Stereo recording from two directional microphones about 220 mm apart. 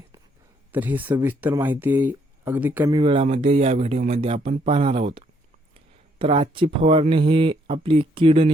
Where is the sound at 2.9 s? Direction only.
25° right (ahead or behind).